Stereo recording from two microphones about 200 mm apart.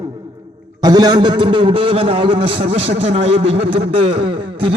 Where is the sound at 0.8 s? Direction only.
20° right (ahead or behind).